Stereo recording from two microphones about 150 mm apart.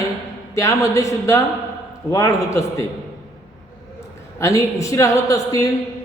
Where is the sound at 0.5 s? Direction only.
20° left (ahead or behind).